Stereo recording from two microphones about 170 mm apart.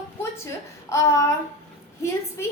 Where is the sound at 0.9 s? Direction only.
15° left (ahead or behind).